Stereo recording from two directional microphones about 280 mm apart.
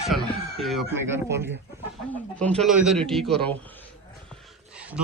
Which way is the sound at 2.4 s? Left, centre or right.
Centre.